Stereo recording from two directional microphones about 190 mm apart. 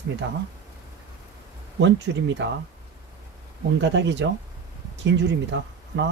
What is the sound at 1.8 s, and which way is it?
Speech, 70° right (ahead or behind).